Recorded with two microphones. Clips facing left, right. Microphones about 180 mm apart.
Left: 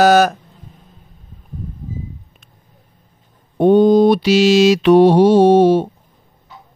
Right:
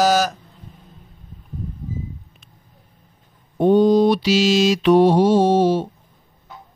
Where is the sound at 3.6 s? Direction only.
60° left (ahead or behind).